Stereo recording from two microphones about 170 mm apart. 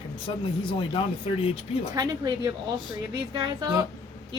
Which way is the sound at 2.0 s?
20° right (ahead or behind).